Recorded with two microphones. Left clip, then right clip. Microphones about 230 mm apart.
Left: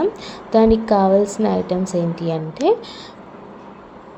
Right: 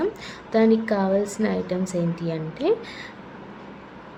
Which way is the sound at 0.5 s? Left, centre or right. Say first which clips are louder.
Left 6 dB; centre.